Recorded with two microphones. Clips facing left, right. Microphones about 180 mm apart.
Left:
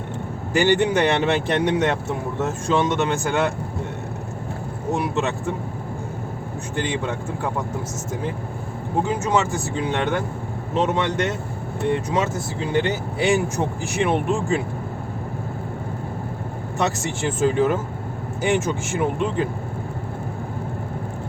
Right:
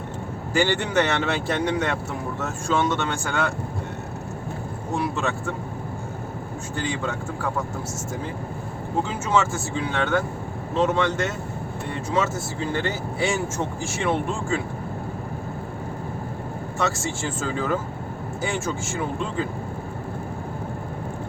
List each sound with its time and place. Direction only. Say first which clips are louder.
0.5 s speech: left 4 dB; 15° left (ahead or behind)
4.9 s speech: left 1 dB; 20° left (ahead or behind)
6.7 s speech: left 3 dB; 20° left (ahead or behind)
9.0 s speech: left 2 dB; 15° left (ahead or behind)
16.7 s speech: left 2 dB; 15° left (ahead or behind)